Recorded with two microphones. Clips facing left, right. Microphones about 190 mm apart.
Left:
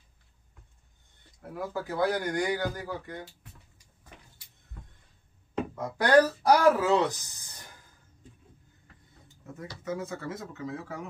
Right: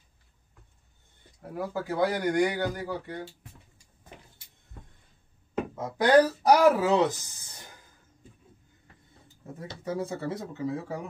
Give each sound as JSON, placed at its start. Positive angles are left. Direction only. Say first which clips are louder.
{"t": 1.5, "sound": "a man's voice", "louder": "right 2 dB", "side_deg": -15}
{"t": 5.5, "sound": "a sound", "louder": "right 1 dB", "side_deg": -5}
{"t": 6.0, "sound": "speech", "louder": "right 1 dB", "side_deg": -15}
{"t": 7.1, "sound": "speech", "louder": "right 3 dB", "side_deg": 15}
{"t": 9.6, "sound": "speech", "louder": "right 2 dB", "side_deg": -30}